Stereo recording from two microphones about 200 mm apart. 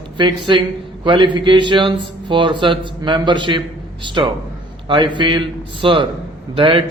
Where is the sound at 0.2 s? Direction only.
25° right (ahead or behind).